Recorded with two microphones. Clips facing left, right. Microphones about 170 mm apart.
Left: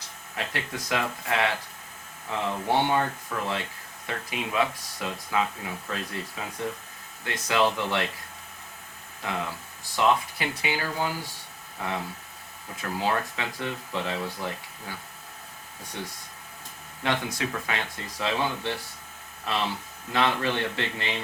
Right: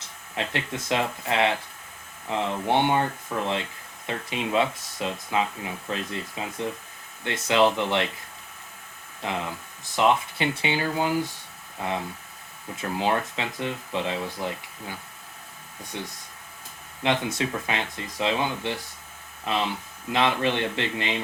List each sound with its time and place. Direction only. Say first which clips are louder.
0.3 s speech: right 3 dB; 25° right (ahead or behind)
9.2 s speech: right 2 dB; 20° right (ahead or behind)
17.0 s speech: right 3 dB; 20° right (ahead or behind)